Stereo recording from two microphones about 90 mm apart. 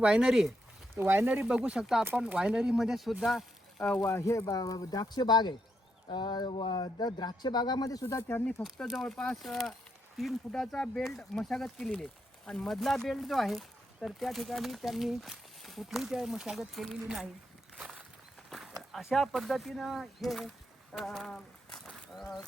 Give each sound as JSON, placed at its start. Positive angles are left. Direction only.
{"t": 0.0, "sound": "speech", "side_deg": -5}
{"t": 0.9, "sound": "speech", "side_deg": -25}
{"t": 1.3, "sound": "speech", "side_deg": -10}
{"t": 3.8, "sound": "speech", "side_deg": 15}
{"t": 4.1, "sound": "speech", "side_deg": 35}
{"t": 6.5, "sound": "speech", "side_deg": 75}
{"t": 8.0, "sound": "speech", "side_deg": 30}
{"t": 8.6, "sound": "speech", "side_deg": 0}
{"t": 17.7, "sound": "a sound", "side_deg": -5}
{"t": 18.8, "sound": "speech", "side_deg": 0}